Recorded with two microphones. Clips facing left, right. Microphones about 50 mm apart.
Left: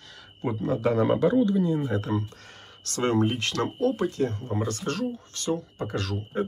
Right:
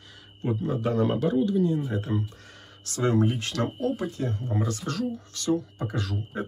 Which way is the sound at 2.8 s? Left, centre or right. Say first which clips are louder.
Even; left.